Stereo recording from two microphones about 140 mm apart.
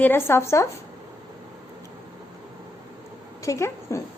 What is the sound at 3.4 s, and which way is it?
Speech, 20° left (ahead or behind).